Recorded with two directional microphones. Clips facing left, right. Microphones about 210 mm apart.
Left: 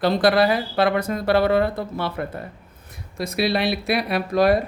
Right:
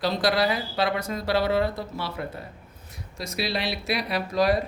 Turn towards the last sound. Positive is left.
turn(degrees=55)  # may be behind; listen again after turning